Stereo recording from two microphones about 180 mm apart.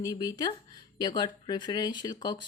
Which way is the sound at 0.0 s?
20° left (ahead or behind).